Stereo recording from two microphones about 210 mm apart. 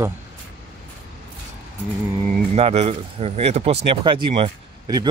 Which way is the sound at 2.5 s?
30° right (ahead or behind).